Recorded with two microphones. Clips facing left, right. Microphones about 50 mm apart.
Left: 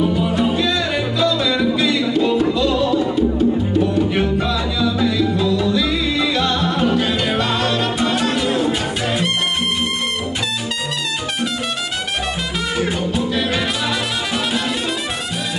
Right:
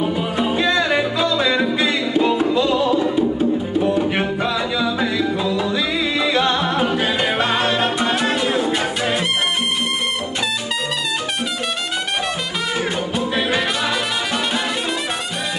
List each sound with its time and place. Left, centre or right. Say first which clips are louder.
0.1 s music: left 2 dB; right
8.1 s music: even; centre
8.7 s music: right 1 dB; centre
13.3 s music: even; centre